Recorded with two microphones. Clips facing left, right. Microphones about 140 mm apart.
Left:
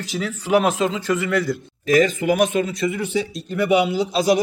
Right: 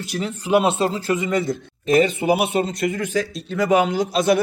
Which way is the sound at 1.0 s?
20° right (ahead or behind).